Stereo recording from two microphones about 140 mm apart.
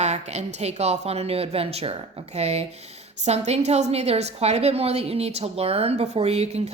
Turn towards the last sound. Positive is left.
turn(degrees=-50)  # may be behind; listen again after turning